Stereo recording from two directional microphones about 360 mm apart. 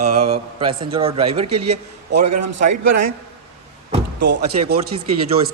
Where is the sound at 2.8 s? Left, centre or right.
Right.